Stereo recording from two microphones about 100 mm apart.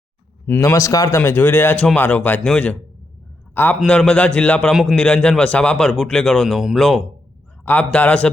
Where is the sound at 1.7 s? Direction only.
10° left (ahead or behind).